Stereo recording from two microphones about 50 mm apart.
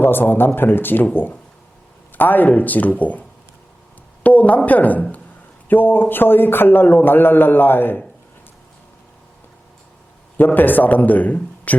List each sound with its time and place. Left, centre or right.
0.0 s a man's voice: left
2.1 s a man's voice: left
10.3 s a man's voice: left